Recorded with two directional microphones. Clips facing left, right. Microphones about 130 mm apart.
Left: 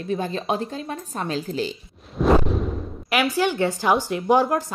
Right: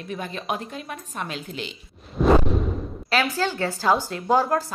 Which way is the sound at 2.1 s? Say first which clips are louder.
Even; centre (ahead or behind).